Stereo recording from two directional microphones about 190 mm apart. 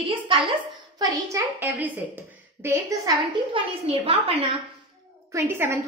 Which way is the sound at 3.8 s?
30° right (ahead or behind).